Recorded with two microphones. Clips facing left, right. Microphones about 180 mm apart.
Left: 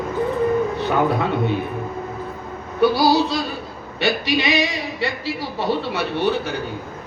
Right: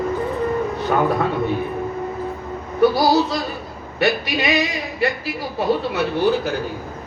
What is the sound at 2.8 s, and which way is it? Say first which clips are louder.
A man's voice: right 1 dB; 70° left (ahead or behind).